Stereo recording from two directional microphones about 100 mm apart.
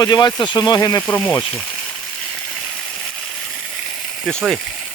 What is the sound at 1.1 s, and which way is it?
Speech, 15° left (ahead or behind).